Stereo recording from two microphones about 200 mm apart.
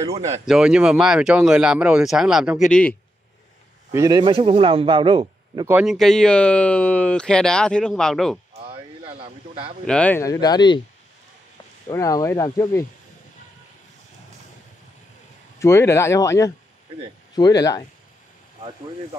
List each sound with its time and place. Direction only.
0.5 s speech: 5° right (ahead or behind)
3.9 s a man's voice: 20° right (ahead or behind)
5.7 s speech: 5° right (ahead or behind)
8.5 s a sound: 30° right (ahead or behind)
9.8 s speech: 5° left (ahead or behind)
11.9 s speech: 15° left (ahead or behind)
15.6 s speech: 15° left (ahead or behind)